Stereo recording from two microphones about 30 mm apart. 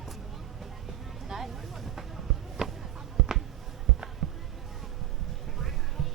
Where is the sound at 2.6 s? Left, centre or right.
Right.